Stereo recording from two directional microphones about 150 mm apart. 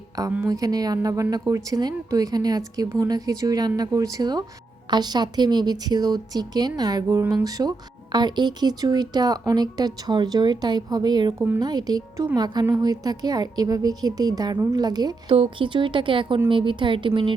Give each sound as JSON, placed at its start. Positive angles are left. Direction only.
{"t": 0.3, "sound": "a woman's voice", "side_deg": -15}